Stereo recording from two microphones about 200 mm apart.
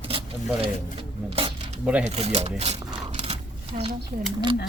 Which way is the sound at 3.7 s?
40° right (ahead or behind).